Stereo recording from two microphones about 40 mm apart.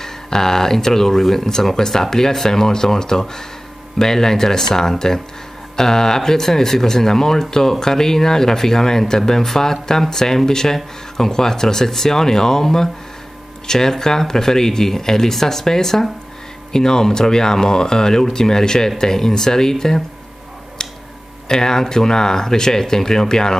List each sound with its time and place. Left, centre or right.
0.0 s speech: centre
21.5 s speech: centre